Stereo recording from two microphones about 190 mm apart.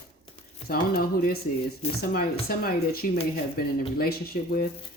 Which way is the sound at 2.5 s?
50° left (ahead or behind).